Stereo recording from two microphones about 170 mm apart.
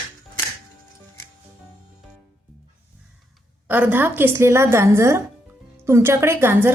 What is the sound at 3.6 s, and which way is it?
A woman's voice, 10° right (ahead or behind).